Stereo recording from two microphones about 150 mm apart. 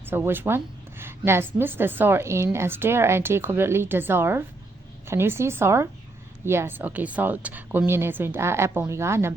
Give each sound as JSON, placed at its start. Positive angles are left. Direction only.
{"t": 0.0, "sound": "a woman's voice", "side_deg": -15}